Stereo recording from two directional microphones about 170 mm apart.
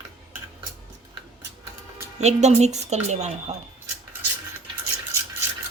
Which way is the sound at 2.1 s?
40° right (ahead or behind).